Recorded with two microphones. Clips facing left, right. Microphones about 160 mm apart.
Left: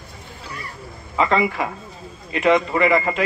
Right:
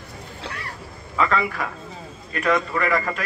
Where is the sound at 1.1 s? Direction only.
20° left (ahead or behind).